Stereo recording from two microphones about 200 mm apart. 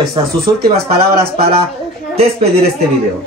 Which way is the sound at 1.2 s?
30° right (ahead or behind).